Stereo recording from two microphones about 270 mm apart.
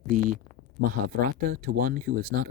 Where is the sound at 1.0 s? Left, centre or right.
Right.